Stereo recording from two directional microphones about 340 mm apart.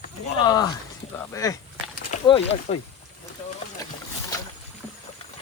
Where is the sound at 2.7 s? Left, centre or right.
Centre.